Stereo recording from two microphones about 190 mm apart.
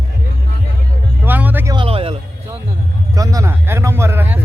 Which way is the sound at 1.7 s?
30° right (ahead or behind).